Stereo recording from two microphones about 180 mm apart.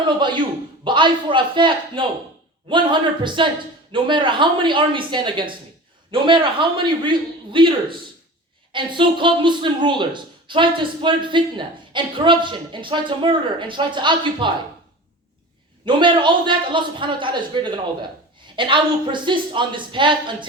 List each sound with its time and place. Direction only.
0.0 s a man's voice: 25° right (ahead or behind)
8.7 s a man's voice: 25° right (ahead or behind)
15.9 s a man's voice: 25° right (ahead or behind)